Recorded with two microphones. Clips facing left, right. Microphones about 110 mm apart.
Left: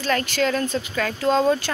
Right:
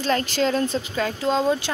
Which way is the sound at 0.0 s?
30° right (ahead or behind).